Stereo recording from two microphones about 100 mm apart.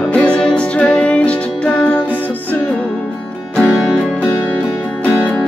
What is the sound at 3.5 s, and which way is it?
Music, 5° left (ahead or behind).